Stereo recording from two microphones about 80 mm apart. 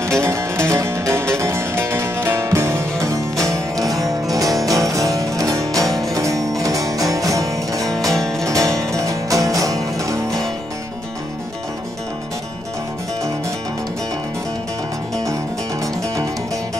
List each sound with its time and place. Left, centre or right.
0.2 s music: right
7.8 s music: centre
8.5 s music: right